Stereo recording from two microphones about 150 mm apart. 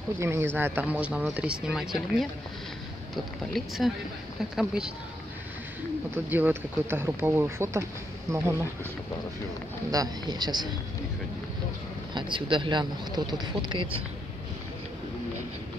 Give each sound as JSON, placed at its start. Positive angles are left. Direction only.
{"t": 0.2, "sound": "speech", "side_deg": -20}
{"t": 3.5, "sound": "speech", "side_deg": 0}
{"t": 6.1, "sound": "speech", "side_deg": -10}
{"t": 9.8, "sound": "speech", "side_deg": -25}
{"t": 12.1, "sound": "speech", "side_deg": -30}